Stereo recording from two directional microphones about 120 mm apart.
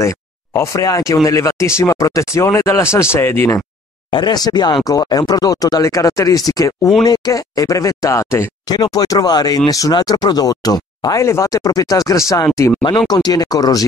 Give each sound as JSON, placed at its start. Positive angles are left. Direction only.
{"t": 0.0, "sound": "speech", "side_deg": 25}
{"t": 4.1, "sound": "speech", "side_deg": 35}
{"t": 8.6, "sound": "speech", "side_deg": 35}